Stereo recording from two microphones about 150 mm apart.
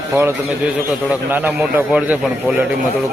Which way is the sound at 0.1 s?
15° right (ahead or behind).